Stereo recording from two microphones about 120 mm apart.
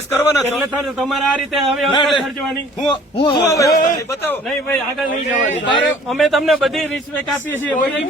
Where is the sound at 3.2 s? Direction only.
50° left (ahead or behind).